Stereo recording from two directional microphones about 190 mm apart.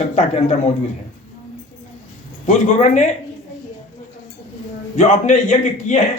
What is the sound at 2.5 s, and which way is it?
Speech, 40° left (ahead or behind).